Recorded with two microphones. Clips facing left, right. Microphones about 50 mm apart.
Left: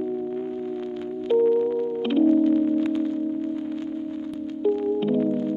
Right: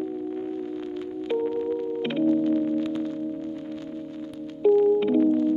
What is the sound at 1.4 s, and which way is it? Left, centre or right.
Music, centre.